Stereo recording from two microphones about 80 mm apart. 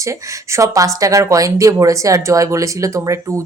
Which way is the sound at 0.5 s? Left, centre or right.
Right.